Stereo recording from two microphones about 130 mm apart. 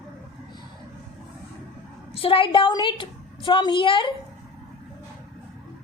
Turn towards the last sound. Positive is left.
turn(degrees=40)  # may be behind; listen again after turning